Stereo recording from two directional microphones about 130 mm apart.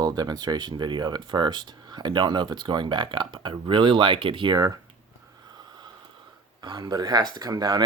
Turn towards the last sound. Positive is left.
turn(degrees=-30)  # may be behind; listen again after turning